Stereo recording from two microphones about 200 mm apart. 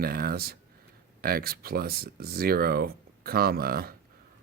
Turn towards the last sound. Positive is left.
turn(degrees=-50)  # may be behind; listen again after turning